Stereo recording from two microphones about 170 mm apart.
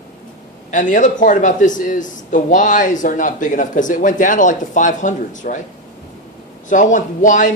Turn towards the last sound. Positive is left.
turn(degrees=50)  # may be behind; listen again after turning